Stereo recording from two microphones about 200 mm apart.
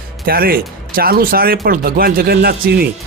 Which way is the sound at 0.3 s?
50° right (ahead or behind).